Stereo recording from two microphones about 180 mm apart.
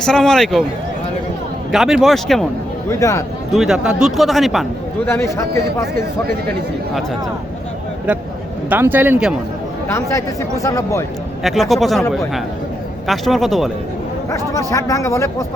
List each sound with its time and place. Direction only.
0.0 s speech: 5° left (ahead or behind)
1.7 s speech: centre (ahead or behind)
3.0 s speech: 15° left (ahead or behind)
3.5 s speech: 5° right (ahead or behind)
5.0 s speech: 15° left (ahead or behind)
8.7 s speech: 10° right (ahead or behind)
9.9 s speech: 15° left (ahead or behind)
11.4 s speech: centre (ahead or behind)
13.1 s speech: centre (ahead or behind)
14.7 s speech: 15° left (ahead or behind)